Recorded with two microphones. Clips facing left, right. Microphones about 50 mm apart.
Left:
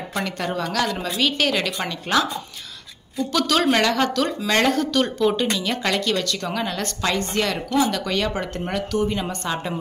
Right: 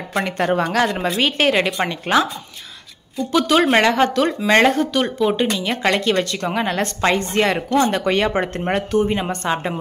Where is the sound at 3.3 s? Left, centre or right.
Right.